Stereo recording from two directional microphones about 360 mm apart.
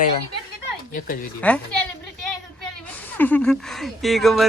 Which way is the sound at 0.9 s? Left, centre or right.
Left.